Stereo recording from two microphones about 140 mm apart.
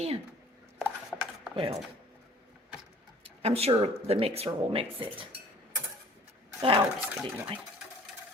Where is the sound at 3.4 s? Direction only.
45° right (ahead or behind).